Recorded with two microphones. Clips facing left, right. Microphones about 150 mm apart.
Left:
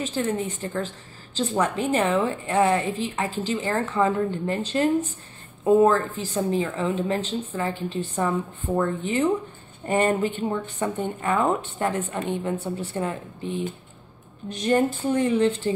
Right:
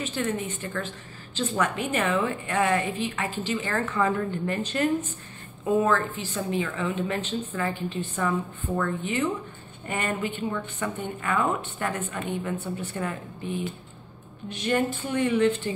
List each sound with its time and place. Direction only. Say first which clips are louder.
0.0 s a woman's voice: left 3 dB; 30° left (ahead or behind)